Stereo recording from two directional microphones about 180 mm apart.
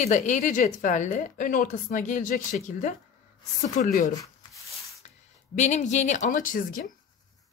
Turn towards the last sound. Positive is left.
turn(degrees=50)  # may be behind; listen again after turning